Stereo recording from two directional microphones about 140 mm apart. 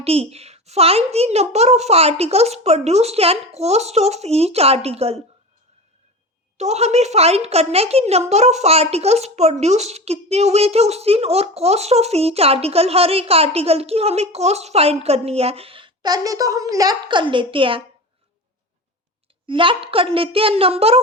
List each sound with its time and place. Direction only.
0.0 s a woman's voice: 45° right (ahead or behind)
6.6 s a woman's voice: 50° right (ahead or behind)
16.0 s a woman's voice: 25° right (ahead or behind)
19.5 s a woman's voice: 35° right (ahead or behind)